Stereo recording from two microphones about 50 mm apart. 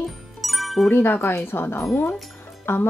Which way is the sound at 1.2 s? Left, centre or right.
Left.